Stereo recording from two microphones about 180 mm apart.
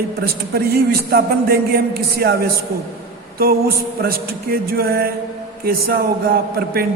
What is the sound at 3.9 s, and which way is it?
Speech, 55° right (ahead or behind).